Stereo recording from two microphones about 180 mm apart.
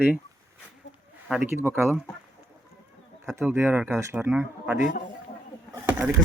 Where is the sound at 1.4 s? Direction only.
10° right (ahead or behind).